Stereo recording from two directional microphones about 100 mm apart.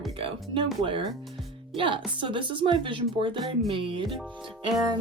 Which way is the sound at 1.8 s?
55° right (ahead or behind).